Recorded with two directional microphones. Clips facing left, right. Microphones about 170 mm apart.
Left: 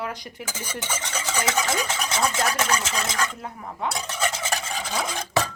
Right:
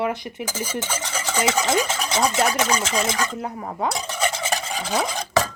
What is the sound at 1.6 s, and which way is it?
Stir, 30° right (ahead or behind).